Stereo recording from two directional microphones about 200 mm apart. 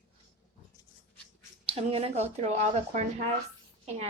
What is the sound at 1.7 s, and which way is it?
Speech, 30° right (ahead or behind).